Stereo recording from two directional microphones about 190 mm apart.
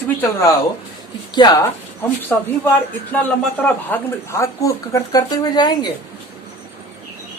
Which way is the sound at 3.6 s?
15° left (ahead or behind).